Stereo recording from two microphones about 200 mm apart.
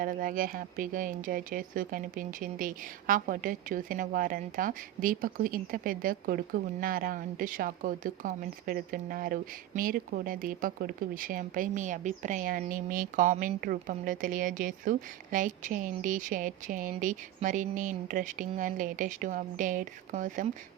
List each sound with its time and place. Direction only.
0.0 s speech: 45° right (ahead or behind)